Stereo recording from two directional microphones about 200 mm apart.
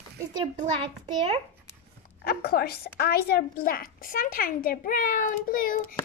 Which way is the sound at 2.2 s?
50° left (ahead or behind).